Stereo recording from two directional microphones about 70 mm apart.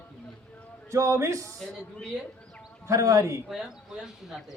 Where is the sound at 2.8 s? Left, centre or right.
Right.